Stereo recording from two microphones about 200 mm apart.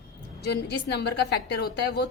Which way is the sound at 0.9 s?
55° left (ahead or behind).